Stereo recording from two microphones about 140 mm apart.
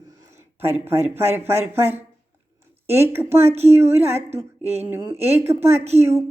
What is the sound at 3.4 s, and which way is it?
Speech, 50° right (ahead or behind).